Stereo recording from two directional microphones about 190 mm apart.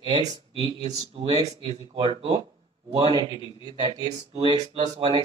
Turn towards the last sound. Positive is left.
turn(degrees=-35)  # may be behind; listen again after turning